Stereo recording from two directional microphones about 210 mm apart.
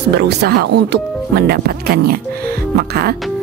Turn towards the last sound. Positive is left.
turn(degrees=-50)  # may be behind; listen again after turning